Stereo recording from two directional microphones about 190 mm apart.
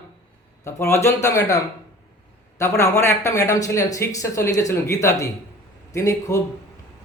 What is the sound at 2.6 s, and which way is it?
Speech, 15° left (ahead or behind).